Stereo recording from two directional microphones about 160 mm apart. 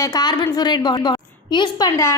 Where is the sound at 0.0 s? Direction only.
25° left (ahead or behind).